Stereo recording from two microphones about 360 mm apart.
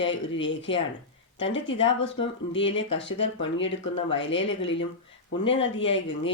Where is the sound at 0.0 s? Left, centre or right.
Left.